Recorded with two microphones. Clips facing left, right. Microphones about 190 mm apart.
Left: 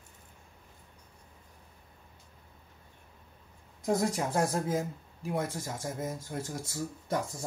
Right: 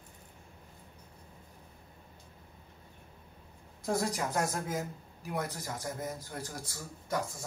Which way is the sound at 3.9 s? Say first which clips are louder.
Left 3 dB; 20° left (ahead or behind).